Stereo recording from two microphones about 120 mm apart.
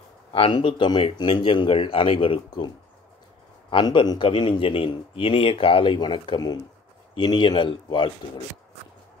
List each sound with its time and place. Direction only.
0.3 s a man's voice: 45° left (ahead or behind)
3.7 s a man's voice: 40° left (ahead or behind)